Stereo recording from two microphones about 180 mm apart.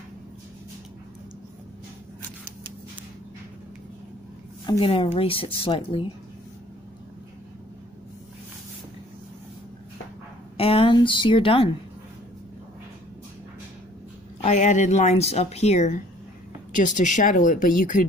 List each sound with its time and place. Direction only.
4.6 s speech: 30° left (ahead or behind)
10.6 s speech: 30° left (ahead or behind)
14.4 s speech: 45° left (ahead or behind)